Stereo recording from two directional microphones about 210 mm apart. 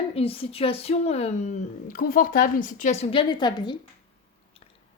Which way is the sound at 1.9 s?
40° left (ahead or behind).